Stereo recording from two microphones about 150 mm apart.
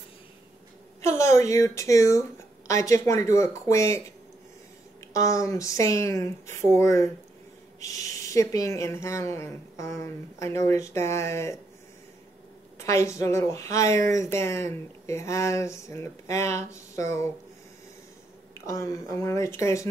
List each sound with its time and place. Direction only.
1.0 s a woman's voice: 20° left (ahead or behind)
5.1 s a woman's voice: 20° left (ahead or behind)
12.7 s a woman's voice: 20° left (ahead or behind)
18.7 s a woman's voice: 20° left (ahead or behind)